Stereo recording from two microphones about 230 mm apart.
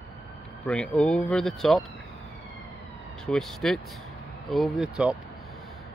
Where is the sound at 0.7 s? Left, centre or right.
Centre.